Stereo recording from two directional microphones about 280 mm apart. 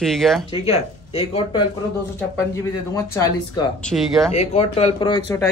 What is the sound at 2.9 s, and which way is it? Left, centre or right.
Speech, centre.